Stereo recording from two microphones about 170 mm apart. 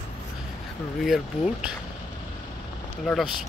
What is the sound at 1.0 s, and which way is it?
Speech, centre (ahead or behind).